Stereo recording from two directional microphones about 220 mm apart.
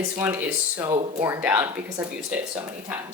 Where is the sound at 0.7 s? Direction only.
20° right (ahead or behind).